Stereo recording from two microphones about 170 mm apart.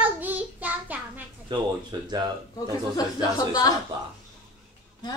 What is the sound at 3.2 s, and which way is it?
Speech, 25° left (ahead or behind).